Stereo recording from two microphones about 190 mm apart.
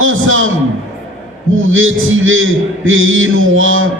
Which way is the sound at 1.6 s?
90° right.